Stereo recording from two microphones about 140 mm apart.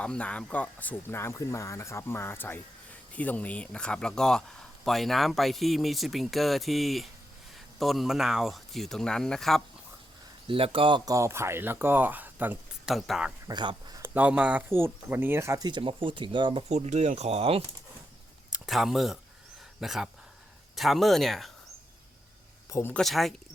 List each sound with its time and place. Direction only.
0.0 s speech: 10° left (ahead or behind)
10.4 s speech: 40° right (ahead or behind); by 12.9 s 10° right (ahead or behind)
12.9 s speech: centre (ahead or behind)
13.5 s speech: 30° right (ahead or behind)
14.0 s speech: 10° right (ahead or behind); by 17.6 s 45° right (ahead or behind)
18.5 s speech: 5° right (ahead or behind)
22.7 s speech: 15° left (ahead or behind)
23.0 s speech: centre (ahead or behind)